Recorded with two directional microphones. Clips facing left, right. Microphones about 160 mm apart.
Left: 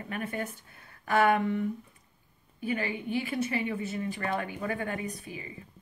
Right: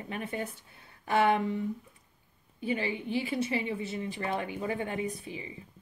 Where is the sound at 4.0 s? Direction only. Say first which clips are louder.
Left 1 dB; 20° right (ahead or behind).